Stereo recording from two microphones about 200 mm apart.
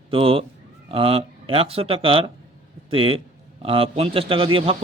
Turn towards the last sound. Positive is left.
turn(degrees=-25)  # may be behind; listen again after turning